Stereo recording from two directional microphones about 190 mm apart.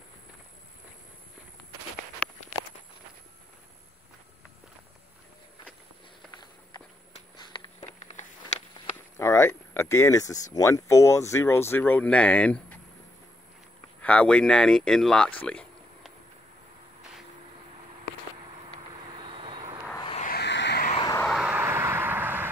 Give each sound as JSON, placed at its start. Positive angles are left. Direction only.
{"t": 7.8, "sound": "a sound", "side_deg": 40}
{"t": 9.2, "sound": "speech", "side_deg": 15}
{"t": 14.0, "sound": "speech", "side_deg": 5}
{"t": 19.2, "sound": "vehicle", "side_deg": -25}
{"t": 20.2, "sound": "a sound", "side_deg": 55}
{"t": 21.2, "sound": "vehicle", "side_deg": 0}